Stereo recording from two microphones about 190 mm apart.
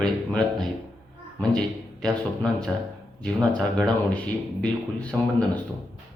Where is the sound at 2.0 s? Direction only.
5° left (ahead or behind).